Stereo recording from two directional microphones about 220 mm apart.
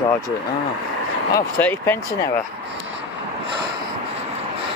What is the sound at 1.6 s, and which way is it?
Speech, 10° left (ahead or behind).